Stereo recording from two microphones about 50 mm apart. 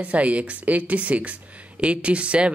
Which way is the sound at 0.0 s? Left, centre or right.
Right.